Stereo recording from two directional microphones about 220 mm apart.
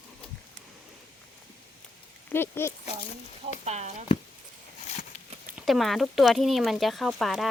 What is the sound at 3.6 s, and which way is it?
Speech, 30° right (ahead or behind).